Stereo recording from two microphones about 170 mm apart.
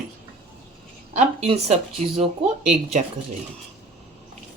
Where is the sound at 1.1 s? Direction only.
40° right (ahead or behind).